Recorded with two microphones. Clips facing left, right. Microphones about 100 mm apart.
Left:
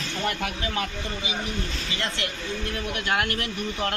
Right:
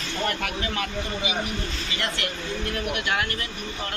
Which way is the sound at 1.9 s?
25° left (ahead or behind).